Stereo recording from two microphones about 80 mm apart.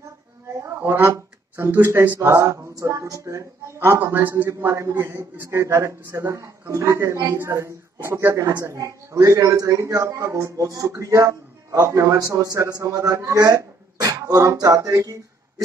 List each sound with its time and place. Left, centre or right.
0.6 s a sound: right
1.6 s speech: right
2.1 s speech: right
4.6 s a man's voice: right